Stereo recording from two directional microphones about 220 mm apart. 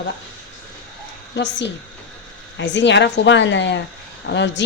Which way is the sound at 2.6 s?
55° left (ahead or behind).